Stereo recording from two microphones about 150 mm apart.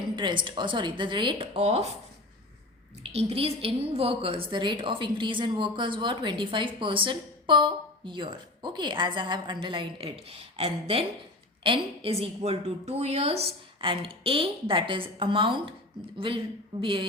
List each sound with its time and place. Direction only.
0.2 s a woman's voice: 30° right (ahead or behind)
3.0 s a woman's voice: 40° right (ahead or behind)